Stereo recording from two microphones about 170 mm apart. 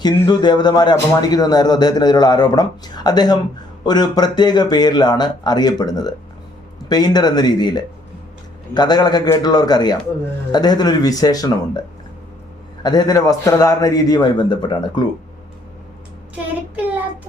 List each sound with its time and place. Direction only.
0.0 s speech: 25° left (ahead or behind)
12.8 s speech: 25° left (ahead or behind)